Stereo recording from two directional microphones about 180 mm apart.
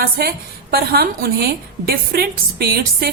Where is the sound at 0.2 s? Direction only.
60° right (ahead or behind).